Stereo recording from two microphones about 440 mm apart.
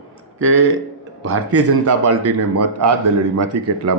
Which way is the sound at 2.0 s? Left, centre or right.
Right.